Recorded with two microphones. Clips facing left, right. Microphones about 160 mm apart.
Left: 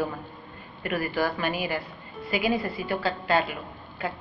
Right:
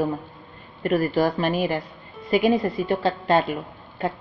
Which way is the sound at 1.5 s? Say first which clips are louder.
Right 6 dB; 5° left (ahead or behind).